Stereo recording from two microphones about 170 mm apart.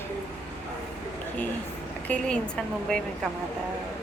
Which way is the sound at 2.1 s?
10° left (ahead or behind).